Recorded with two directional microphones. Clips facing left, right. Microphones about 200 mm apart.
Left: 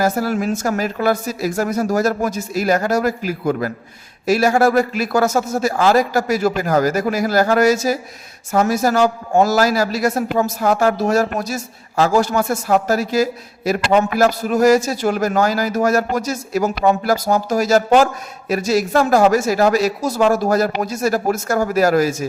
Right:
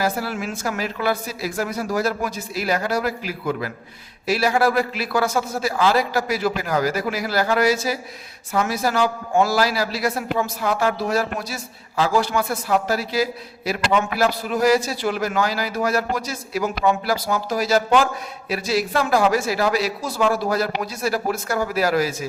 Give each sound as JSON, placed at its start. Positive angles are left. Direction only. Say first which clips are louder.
{"t": 0.0, "sound": "a man's voice", "louder": "left 6 dB", "side_deg": 45}